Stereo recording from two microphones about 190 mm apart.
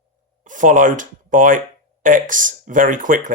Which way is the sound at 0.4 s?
40° right (ahead or behind).